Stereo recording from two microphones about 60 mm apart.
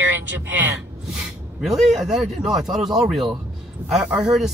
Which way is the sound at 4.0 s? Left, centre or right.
Centre.